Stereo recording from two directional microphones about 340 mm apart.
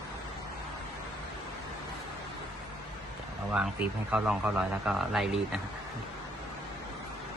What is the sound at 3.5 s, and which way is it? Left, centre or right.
A man's voice, centre.